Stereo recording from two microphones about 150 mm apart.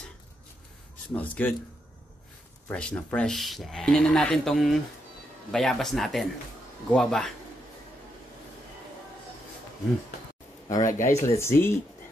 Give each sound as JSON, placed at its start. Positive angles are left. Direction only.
{"t": 1.0, "sound": "speech", "side_deg": 10}
{"t": 2.7, "sound": "speech", "side_deg": 5}
{"t": 10.7, "sound": "speech", "side_deg": 20}